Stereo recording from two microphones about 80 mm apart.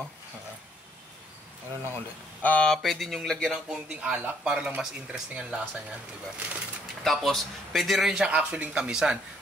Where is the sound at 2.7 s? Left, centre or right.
Centre.